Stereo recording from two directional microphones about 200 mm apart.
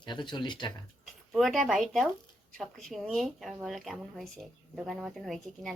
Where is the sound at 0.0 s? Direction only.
20° left (ahead or behind).